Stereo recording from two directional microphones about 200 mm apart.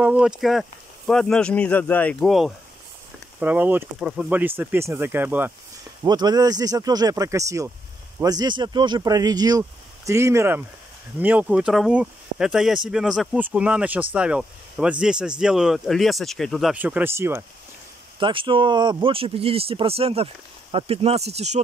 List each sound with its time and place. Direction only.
0.0 s speech: 5° right (ahead or behind)
6.0 s speech: 20° right (ahead or behind)
18.2 s speech: 25° right (ahead or behind)